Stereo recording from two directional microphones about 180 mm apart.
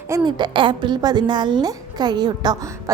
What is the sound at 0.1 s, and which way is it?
A woman's voice, 25° right (ahead or behind).